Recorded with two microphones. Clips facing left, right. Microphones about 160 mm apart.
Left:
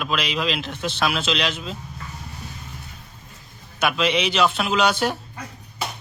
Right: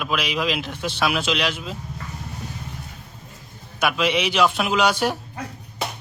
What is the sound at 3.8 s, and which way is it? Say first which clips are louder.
Speech: even; 10° right (ahead or behind).